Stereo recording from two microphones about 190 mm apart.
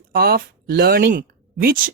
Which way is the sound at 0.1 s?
55° right (ahead or behind).